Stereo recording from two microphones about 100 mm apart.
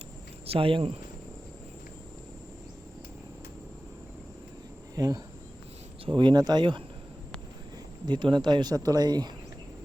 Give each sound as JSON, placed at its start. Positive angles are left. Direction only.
{"t": 0.4, "sound": "speech", "side_deg": -70}
{"t": 4.9, "sound": "speech", "side_deg": -40}
{"t": 6.1, "sound": "speech", "side_deg": -50}
{"t": 8.0, "sound": "speech", "side_deg": -50}